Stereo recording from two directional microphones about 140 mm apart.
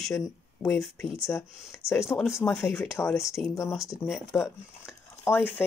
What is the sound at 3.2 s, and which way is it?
Speech, centre (ahead or behind).